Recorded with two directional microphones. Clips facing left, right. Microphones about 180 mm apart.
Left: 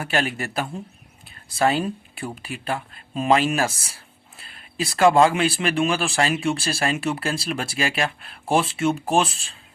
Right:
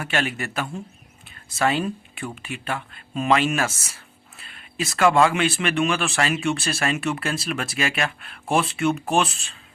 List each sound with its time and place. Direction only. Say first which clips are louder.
0.0 s speech: left 1 dB; 35° left (ahead or behind)